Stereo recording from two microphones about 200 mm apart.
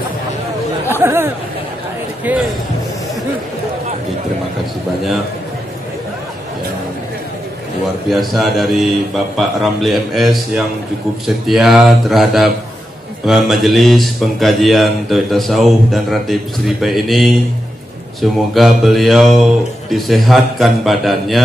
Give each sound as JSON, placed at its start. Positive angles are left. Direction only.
{"t": 1.0, "sound": "speech", "side_deg": -10}
{"t": 8.1, "sound": "a man's voice", "side_deg": 0}
{"t": 18.5, "sound": "a man's voice", "side_deg": 0}